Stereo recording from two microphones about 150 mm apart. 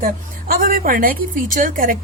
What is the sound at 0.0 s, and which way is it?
A woman's voice, 75° right (ahead or behind).